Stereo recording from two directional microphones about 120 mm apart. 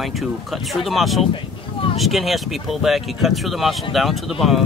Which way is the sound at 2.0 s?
Centre (ahead or behind).